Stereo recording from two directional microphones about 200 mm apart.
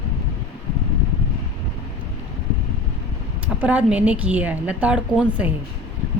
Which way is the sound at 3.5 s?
5° right (ahead or behind).